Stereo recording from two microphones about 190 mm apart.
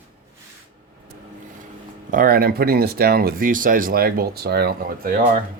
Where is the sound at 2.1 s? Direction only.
50° right (ahead or behind).